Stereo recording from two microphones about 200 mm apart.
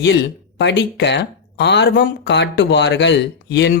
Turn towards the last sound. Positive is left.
turn(degrees=60)  # may be behind; listen again after turning